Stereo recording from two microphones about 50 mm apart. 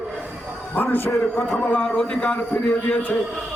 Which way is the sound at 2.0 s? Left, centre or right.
Left.